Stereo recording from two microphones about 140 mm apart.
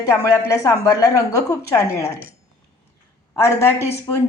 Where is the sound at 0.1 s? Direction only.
20° left (ahead or behind).